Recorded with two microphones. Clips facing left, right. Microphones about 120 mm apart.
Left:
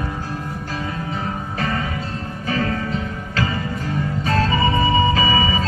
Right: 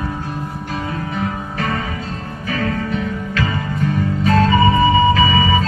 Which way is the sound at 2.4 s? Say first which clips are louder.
Right 1 dB; 30° left (ahead or behind).